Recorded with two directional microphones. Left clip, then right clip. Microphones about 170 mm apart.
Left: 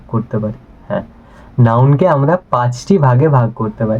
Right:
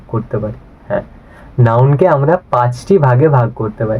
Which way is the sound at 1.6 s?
Centre (ahead or behind).